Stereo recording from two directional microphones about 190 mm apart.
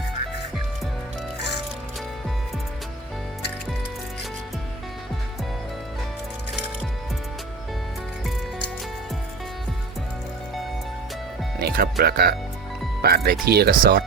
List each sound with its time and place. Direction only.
11.6 s speech: 55° right (ahead or behind)